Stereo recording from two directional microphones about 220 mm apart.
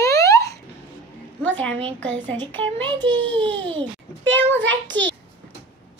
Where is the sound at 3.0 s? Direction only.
55° right (ahead or behind).